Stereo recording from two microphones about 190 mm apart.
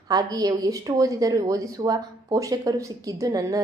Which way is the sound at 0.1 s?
20° right (ahead or behind).